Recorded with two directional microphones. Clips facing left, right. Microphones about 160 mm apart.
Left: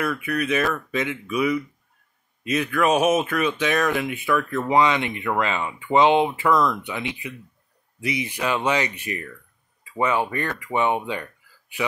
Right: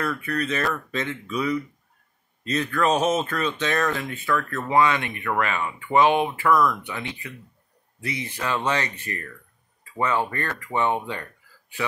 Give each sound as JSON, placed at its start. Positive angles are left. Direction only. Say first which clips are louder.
{"t": 0.0, "sound": "speech", "louder": "left 2 dB", "side_deg": 10}